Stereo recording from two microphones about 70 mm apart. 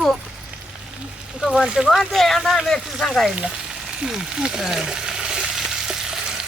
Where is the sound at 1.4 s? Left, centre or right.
Centre.